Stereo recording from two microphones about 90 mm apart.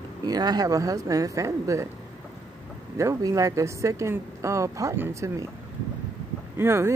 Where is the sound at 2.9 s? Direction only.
35° right (ahead or behind).